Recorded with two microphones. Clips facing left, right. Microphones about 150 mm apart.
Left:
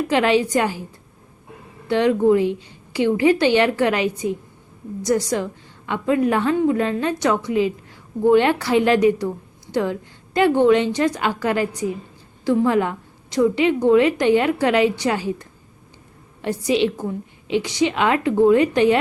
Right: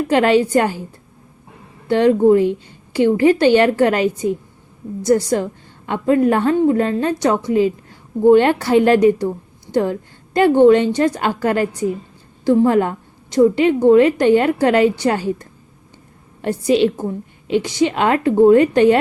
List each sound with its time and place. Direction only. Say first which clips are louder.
0.1 s a woman's voice: right 5 dB; 45° right (ahead or behind)
1.9 s a woman's voice: right 4 dB; 40° right (ahead or behind)
5.0 s a woman's voice: right 5 dB; 30° right (ahead or behind); by 15.4 s 45° right (ahead or behind)
16.6 s a woman's voice: right 4 dB; 45° right (ahead or behind)